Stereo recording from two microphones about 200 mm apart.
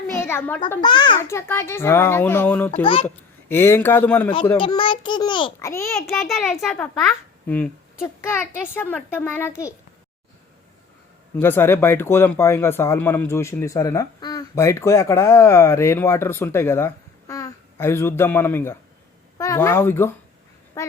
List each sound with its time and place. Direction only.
0.2 s a sound: 10° left (ahead or behind)
0.8 s speech: 20° left (ahead or behind)
2.8 s a child's voice: 25° left (ahead or behind)
3.5 s speech: 15° left (ahead or behind)
4.5 s a child's voice: 25° left (ahead or behind)
6.2 s a child's voice: centre (ahead or behind)
11.3 s speech: 10° left (ahead or behind)